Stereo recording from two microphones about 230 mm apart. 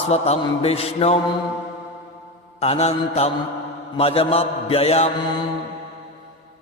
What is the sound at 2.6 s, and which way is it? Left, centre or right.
Mantra, left.